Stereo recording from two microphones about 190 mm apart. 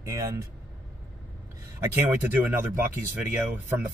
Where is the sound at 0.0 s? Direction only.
15° right (ahead or behind).